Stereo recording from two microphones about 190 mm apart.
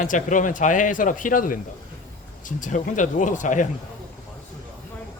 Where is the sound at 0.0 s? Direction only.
40° left (ahead or behind).